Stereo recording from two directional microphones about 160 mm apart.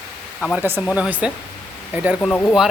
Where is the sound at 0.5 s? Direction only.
15° right (ahead or behind).